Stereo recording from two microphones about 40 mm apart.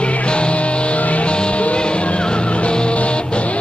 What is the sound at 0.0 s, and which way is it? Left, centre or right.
Music, left.